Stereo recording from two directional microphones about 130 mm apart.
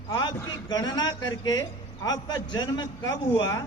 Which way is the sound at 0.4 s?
30° left (ahead or behind).